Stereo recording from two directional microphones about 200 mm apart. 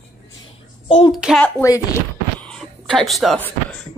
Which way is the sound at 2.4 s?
5° left (ahead or behind).